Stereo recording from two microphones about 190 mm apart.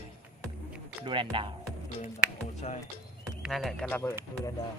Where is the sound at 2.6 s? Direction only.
35° left (ahead or behind).